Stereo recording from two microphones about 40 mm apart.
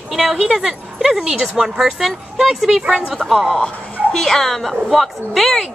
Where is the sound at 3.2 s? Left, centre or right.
Left.